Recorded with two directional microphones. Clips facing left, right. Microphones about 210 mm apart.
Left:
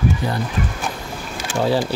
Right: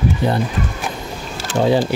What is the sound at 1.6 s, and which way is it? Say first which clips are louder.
Speech: right 3 dB; 20° right (ahead or behind).